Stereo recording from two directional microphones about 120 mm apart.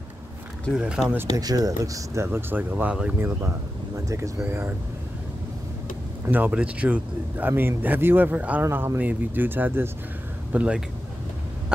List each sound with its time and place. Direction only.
0.7 s a man's voice: 5° right (ahead or behind)
1.3 s speech: 30° right (ahead or behind); by 3.3 s 10° right (ahead or behind)
3.4 s speech: 25° right (ahead or behind)
6.2 s a man's voice: 15° right (ahead or behind)